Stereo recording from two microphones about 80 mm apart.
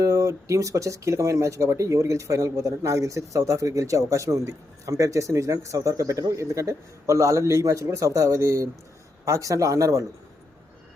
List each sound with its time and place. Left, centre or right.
0.0 s a man's voice: right